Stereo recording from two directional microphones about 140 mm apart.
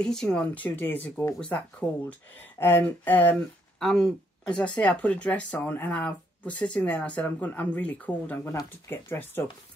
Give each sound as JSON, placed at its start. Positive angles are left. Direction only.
{"t": 0.0, "sound": "speech", "side_deg": 5}